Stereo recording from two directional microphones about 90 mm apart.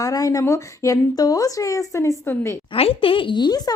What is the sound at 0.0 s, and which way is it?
Speech, 40° left (ahead or behind).